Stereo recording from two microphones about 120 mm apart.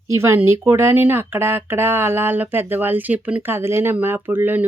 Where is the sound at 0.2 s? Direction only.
20° right (ahead or behind).